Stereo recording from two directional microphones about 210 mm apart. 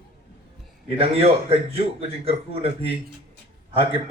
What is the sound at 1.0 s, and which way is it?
Speech, 30° right (ahead or behind).